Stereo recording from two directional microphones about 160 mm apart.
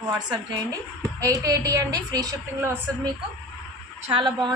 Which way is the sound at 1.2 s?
20° right (ahead or behind).